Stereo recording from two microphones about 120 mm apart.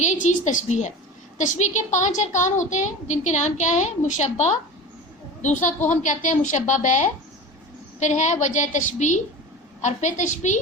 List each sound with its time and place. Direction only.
0.0 s a woman's voice: 80° left
5.4 s a woman's voice: 90° left